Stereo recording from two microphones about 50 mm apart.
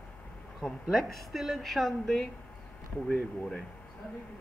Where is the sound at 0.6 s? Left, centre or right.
Centre.